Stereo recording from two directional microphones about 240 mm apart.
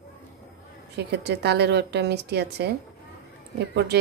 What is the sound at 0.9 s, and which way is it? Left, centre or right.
Speech, right.